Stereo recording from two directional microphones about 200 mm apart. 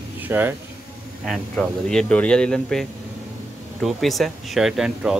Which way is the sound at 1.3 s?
5° left (ahead or behind).